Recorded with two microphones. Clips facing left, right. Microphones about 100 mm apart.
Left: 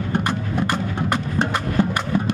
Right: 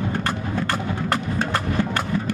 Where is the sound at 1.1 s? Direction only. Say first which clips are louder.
Left 1 dB; 20° left (ahead or behind).